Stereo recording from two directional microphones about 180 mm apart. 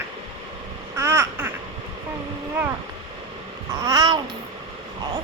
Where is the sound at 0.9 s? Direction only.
15° right (ahead or behind).